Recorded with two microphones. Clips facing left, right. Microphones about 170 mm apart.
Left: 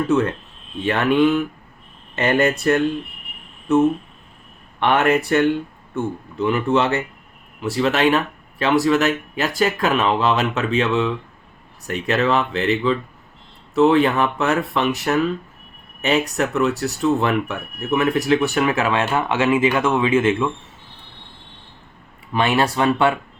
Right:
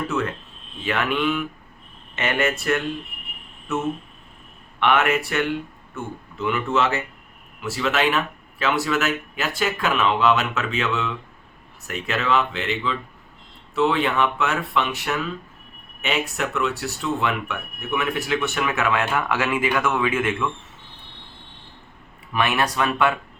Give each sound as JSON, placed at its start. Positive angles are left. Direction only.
{"t": 0.9, "sound": "speech", "side_deg": 35}
{"t": 4.8, "sound": "speech", "side_deg": 35}
{"t": 22.3, "sound": "speech", "side_deg": 30}